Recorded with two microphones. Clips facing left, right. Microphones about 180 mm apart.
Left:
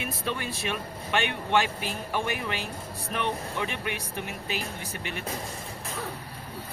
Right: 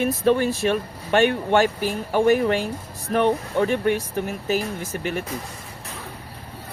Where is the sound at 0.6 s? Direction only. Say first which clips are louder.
Right 10 dB; 45° right (ahead or behind).